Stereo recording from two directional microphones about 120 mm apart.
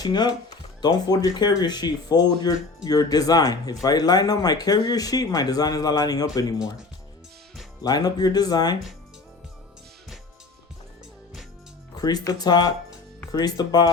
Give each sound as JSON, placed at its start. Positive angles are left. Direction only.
{"t": 0.0, "sound": "speech", "side_deg": 35}
{"t": 7.8, "sound": "speech", "side_deg": 35}
{"t": 11.9, "sound": "speech", "side_deg": 35}